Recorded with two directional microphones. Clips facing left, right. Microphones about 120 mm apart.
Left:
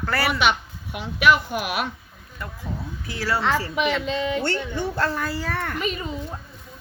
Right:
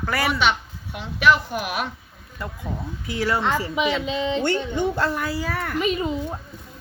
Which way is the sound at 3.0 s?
20° right (ahead or behind).